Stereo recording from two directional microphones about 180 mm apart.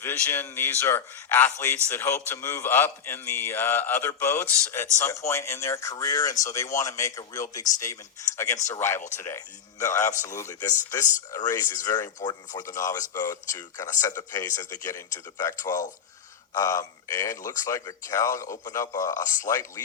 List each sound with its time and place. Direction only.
0.0 s a man's voice: 10° left (ahead or behind)